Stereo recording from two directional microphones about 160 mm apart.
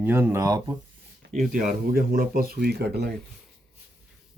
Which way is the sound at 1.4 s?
60° right (ahead or behind).